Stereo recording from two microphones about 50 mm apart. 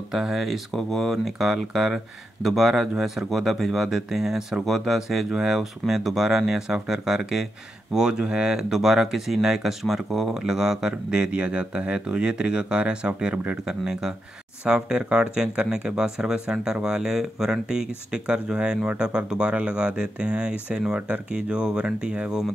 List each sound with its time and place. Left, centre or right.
0.1 s speech: centre; by 13.6 s right
13.7 s speech: centre